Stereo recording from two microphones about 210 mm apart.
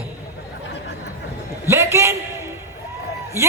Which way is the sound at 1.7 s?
10° right (ahead or behind).